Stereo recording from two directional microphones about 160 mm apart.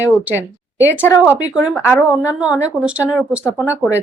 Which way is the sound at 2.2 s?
10° right (ahead or behind).